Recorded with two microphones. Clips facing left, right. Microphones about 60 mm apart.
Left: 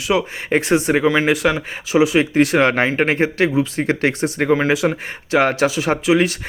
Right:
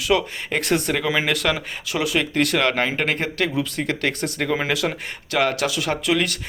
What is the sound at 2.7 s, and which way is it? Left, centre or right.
Speech, left.